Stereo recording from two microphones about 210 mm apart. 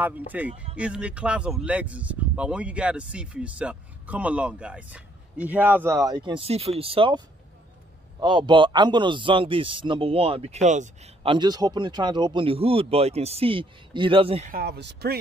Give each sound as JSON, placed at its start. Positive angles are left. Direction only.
{"t": 0.3, "sound": "speech", "side_deg": -5}
{"t": 8.2, "sound": "speech", "side_deg": -20}
{"t": 11.3, "sound": "speech", "side_deg": -20}
{"t": 14.5, "sound": "speech", "side_deg": -50}